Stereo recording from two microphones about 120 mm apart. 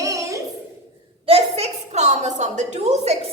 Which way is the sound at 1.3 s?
60° right (ahead or behind).